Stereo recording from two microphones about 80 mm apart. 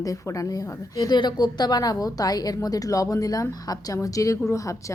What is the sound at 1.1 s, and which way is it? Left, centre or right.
A woman's voice, left.